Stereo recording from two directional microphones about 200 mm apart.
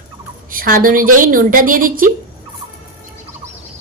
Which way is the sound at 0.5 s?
45° right (ahead or behind).